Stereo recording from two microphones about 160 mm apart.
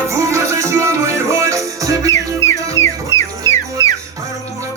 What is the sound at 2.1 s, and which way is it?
Music, 20° left (ahead or behind).